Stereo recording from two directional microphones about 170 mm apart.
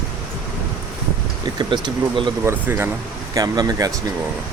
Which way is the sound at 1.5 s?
25° right (ahead or behind).